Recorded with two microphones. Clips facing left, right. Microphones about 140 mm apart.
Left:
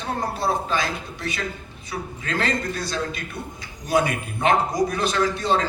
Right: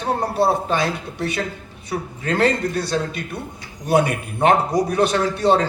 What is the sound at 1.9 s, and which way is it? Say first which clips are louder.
A man's voice: right 5 dB; 60° right (ahead or behind).